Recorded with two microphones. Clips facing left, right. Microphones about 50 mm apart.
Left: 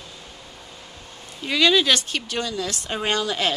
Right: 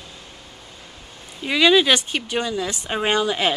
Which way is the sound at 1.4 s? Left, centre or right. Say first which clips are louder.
Right 3 dB; centre.